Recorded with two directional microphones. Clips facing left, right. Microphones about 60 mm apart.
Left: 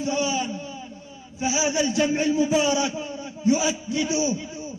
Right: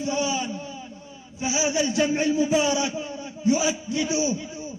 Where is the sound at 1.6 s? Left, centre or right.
Left.